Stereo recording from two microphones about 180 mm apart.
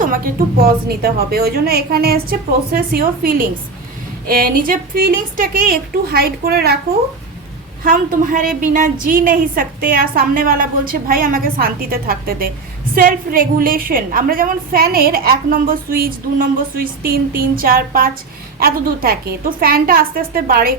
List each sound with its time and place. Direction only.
0.0 s a woman's voice: 50° right (ahead or behind)
7.9 s a woman's voice: 50° right (ahead or behind)